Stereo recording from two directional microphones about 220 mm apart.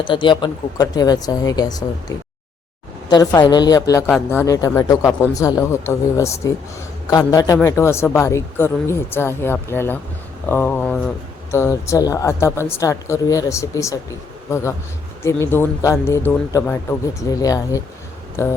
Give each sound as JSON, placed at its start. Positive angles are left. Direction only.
{"t": 0.0, "sound": "a woman's voice", "side_deg": 20}